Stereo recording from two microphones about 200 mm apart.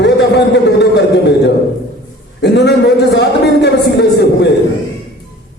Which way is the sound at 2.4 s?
55° left (ahead or behind).